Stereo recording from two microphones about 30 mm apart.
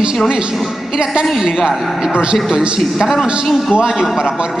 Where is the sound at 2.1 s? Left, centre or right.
Right.